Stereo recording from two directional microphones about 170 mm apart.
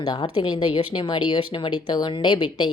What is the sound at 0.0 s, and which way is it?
Speech, 25° left (ahead or behind).